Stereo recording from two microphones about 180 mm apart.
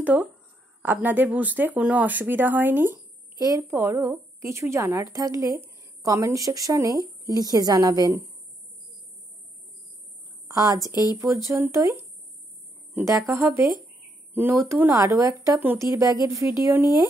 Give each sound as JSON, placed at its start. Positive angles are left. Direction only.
{"t": 0.0, "sound": "speech", "side_deg": -10}
{"t": 10.5, "sound": "a woman's voice", "side_deg": -20}